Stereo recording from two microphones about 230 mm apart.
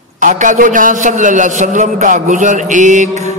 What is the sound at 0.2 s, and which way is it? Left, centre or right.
A man's voice, right.